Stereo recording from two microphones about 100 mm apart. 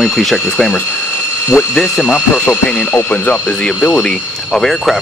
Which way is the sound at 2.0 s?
15° left (ahead or behind).